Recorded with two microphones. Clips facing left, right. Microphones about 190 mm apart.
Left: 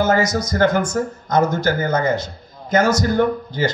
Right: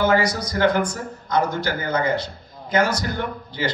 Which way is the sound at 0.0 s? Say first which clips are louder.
Left 2 dB; 45° left (ahead or behind).